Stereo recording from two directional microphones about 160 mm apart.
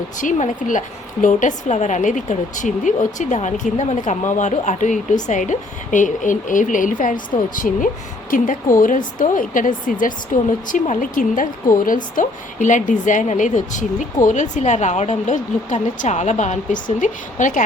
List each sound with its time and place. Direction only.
0.2 s a woman's voice: 50° left (ahead or behind)